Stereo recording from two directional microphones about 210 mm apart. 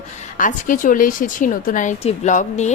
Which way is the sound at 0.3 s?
40° left (ahead or behind).